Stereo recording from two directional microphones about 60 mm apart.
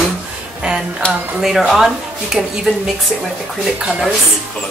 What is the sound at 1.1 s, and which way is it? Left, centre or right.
Speech, centre.